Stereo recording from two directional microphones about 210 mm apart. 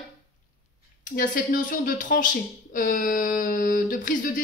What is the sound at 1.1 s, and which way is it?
A woman's voice, 40° left (ahead or behind).